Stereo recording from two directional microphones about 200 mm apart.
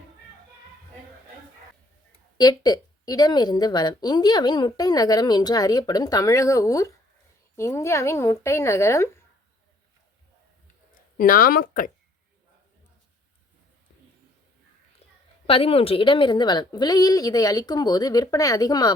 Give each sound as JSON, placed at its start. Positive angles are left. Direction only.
{"t": 2.4, "sound": "a woman's voice", "side_deg": 20}
{"t": 11.2, "sound": "speech", "side_deg": 45}
{"t": 15.4, "sound": "a woman's voice", "side_deg": 30}